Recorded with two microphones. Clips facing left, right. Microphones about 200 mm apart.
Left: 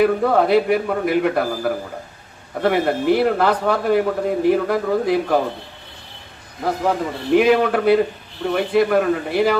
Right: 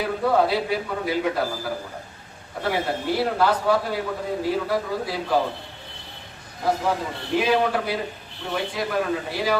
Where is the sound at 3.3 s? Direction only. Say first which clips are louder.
Left 2 dB; 55° left (ahead or behind).